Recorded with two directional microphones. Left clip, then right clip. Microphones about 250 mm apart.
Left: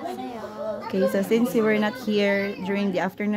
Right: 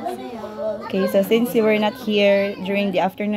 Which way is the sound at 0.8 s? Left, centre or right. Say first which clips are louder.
Right 4 dB; centre.